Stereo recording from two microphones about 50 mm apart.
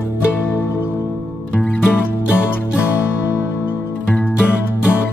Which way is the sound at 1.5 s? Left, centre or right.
Left.